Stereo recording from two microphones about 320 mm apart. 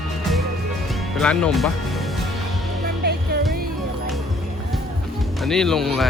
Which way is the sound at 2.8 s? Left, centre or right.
Right.